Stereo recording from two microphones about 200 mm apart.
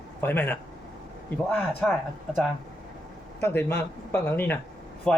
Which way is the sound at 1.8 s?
5° left (ahead or behind).